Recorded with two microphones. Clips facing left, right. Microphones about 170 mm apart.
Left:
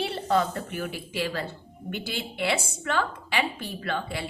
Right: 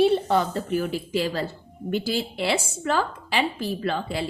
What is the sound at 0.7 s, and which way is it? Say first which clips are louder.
A woman's voice: right 10 dB; 35° right (ahead or behind).